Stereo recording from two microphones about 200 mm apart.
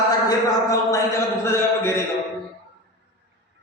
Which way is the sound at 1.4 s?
15° left (ahead or behind).